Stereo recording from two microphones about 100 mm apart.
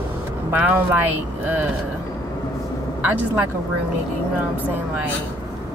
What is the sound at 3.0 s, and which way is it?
Speech, 15° right (ahead or behind).